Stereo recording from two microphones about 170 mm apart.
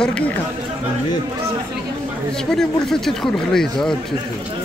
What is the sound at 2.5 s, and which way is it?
A man's voice, centre (ahead or behind).